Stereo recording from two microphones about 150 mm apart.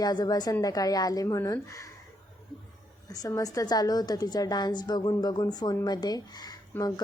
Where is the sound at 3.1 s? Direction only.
25° left (ahead or behind).